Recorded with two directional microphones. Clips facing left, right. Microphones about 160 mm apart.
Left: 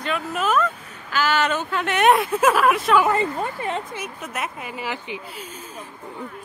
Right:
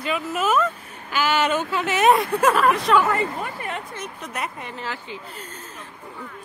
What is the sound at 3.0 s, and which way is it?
Speech, 25° left (ahead or behind).